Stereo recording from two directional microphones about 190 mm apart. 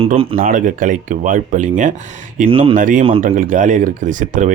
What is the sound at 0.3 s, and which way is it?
Speech, 45° right (ahead or behind).